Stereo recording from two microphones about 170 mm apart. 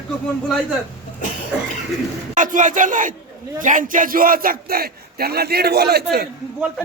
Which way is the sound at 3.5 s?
50° right (ahead or behind).